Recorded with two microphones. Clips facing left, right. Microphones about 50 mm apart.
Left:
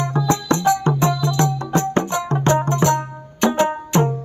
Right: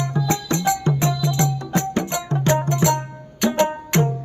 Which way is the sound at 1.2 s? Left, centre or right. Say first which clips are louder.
Left 2 dB; left.